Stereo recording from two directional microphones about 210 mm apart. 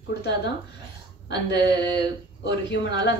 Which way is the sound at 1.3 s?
55° left (ahead or behind).